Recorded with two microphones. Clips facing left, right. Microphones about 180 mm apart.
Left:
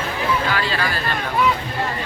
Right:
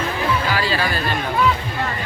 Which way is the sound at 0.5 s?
5° right (ahead or behind).